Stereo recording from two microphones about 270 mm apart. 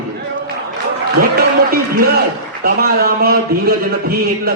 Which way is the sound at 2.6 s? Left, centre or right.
Right.